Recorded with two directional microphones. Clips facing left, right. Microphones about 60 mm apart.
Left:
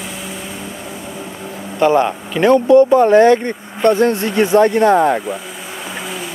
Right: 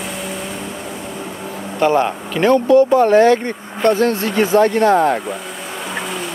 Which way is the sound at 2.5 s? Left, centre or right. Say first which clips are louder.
Left 2 dB; left.